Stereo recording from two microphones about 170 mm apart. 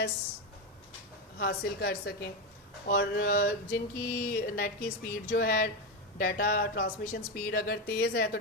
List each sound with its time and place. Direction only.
1.4 s a woman's voice: 70° left (ahead or behind)
2.8 s mantra: 65° left (ahead or behind)